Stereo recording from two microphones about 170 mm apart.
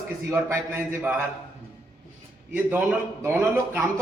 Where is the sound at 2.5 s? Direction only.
10° right (ahead or behind).